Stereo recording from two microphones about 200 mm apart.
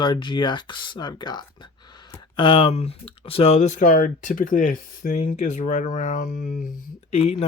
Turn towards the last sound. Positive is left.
turn(degrees=30)  # may be behind; listen again after turning